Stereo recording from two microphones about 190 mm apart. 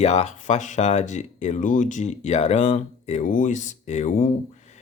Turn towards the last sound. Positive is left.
turn(degrees=35)  # may be behind; listen again after turning